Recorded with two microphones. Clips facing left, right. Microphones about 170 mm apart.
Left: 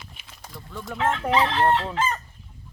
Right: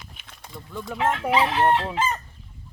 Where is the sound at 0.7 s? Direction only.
Centre (ahead or behind).